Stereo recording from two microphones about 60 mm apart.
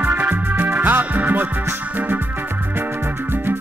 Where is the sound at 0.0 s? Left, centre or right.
Right.